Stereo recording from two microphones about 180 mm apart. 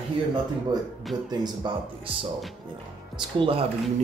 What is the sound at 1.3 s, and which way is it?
Speech, 25° right (ahead or behind).